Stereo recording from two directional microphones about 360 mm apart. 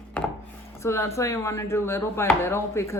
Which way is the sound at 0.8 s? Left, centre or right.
Centre.